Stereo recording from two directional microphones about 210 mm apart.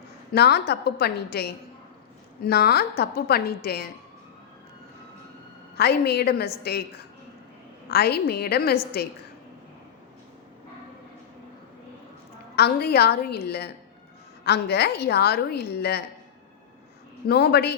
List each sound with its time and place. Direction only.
0.3 s a woman's voice: 50° left (ahead or behind)
5.7 s a woman's voice: 50° left (ahead or behind)
7.9 s a woman's voice: 50° left (ahead or behind)
12.5 s a woman's voice: 50° left (ahead or behind)
17.2 s a woman's voice: 50° left (ahead or behind)